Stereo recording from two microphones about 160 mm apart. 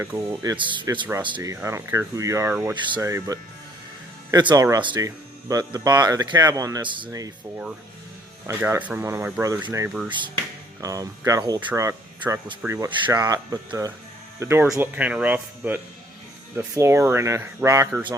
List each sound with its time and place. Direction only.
0.0 s speech: 15° right (ahead or behind)
0.5 s speech: 30° right (ahead or behind); by 2.7 s 15° right (ahead or behind)
2.8 s speech: 25° right (ahead or behind)
8.4 s speech: 15° right (ahead or behind)